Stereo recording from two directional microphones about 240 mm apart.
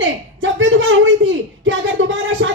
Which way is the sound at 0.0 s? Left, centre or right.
Right.